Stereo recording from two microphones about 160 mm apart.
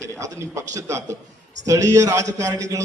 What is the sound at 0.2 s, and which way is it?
A man's voice, 20° right (ahead or behind).